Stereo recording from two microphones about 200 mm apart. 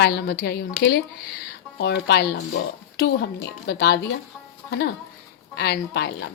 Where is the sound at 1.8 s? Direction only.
60° left (ahead or behind).